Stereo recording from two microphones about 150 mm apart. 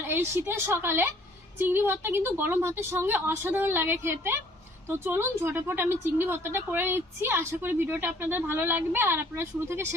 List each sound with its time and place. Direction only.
0.1 s a woman's voice: 15° right (ahead or behind)